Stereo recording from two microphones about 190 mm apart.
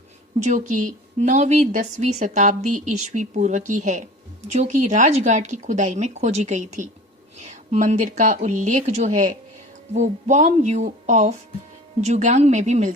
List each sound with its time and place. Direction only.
0.4 s a woman's voice: 40° right (ahead or behind)